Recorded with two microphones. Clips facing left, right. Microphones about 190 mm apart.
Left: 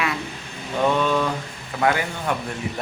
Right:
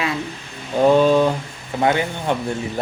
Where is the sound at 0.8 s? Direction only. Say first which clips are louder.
Right 7 dB; 35° right (ahead or behind).